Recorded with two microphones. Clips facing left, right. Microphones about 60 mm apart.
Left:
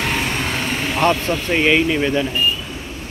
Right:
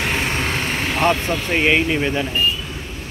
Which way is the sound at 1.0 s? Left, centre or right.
Centre.